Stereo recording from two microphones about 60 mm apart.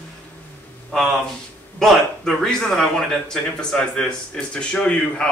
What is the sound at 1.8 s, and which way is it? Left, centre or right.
Speech, centre.